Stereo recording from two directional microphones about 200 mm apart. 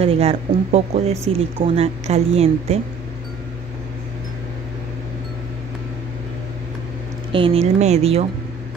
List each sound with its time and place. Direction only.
0.0 s a woman's voice: 30° right (ahead or behind)
7.3 s a woman's voice: 30° right (ahead or behind)